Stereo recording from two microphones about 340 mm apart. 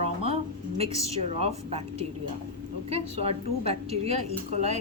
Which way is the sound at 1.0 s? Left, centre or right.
Centre.